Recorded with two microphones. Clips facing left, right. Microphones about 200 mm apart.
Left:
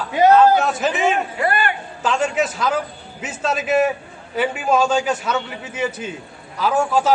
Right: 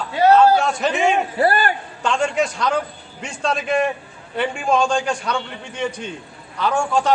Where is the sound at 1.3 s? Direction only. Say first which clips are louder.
Right 3 dB; 35° right (ahead or behind).